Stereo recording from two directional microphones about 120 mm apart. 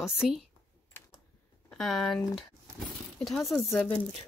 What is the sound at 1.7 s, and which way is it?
Speech, centre (ahead or behind).